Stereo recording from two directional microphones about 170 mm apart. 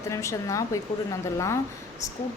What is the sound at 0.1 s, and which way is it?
Speech, 20° left (ahead or behind).